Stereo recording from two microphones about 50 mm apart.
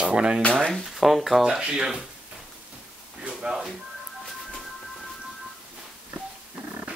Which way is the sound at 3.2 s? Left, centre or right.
Centre.